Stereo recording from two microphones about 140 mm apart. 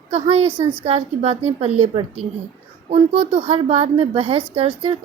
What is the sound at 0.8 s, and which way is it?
A woman's voice, 45° right (ahead or behind).